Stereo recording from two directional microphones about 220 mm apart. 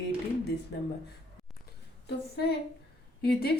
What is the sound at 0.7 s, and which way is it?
Speech, 50° left (ahead or behind).